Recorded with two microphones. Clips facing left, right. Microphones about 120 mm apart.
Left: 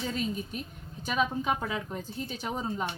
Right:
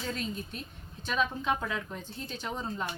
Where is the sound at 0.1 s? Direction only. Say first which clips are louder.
Left 3 dB; 5° left (ahead or behind).